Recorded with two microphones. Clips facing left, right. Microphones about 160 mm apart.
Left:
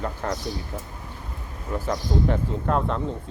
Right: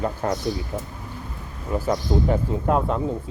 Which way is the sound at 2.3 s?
10° right (ahead or behind).